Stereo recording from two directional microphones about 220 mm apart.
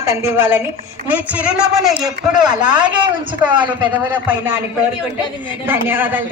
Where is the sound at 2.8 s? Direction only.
20° right (ahead or behind).